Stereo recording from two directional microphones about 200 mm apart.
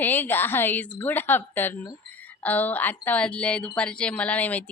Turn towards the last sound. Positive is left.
turn(degrees=5)  # may be behind; listen again after turning